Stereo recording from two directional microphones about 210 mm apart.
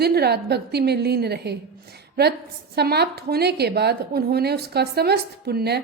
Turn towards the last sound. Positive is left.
turn(degrees=-50)  # may be behind; listen again after turning